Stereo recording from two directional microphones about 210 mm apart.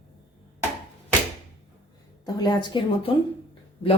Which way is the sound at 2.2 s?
20° left (ahead or behind).